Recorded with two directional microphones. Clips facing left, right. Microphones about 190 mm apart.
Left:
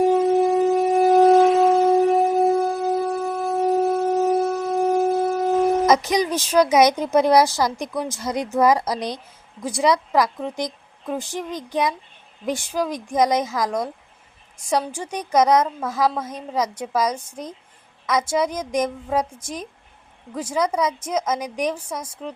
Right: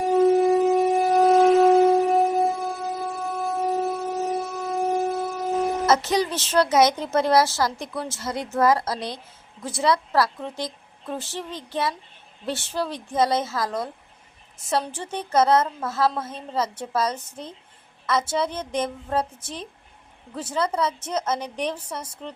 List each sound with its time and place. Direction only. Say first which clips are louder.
0.0 s shofar: left 1 dB; centre (ahead or behind)
5.8 s a woman's voice: left 3 dB; 15° left (ahead or behind)